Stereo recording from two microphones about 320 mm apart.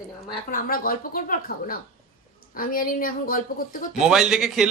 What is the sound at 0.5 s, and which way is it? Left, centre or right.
A woman's voice, left.